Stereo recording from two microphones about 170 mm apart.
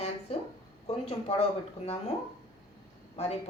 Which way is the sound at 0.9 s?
35° left (ahead or behind).